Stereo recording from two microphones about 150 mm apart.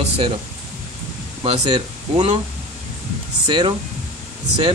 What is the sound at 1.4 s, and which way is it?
Speech, 35° right (ahead or behind).